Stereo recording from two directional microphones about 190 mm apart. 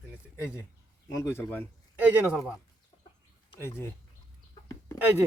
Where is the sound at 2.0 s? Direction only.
10° right (ahead or behind).